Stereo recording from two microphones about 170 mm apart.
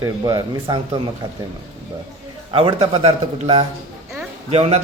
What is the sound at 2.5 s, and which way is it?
A man's voice, 35° right (ahead or behind).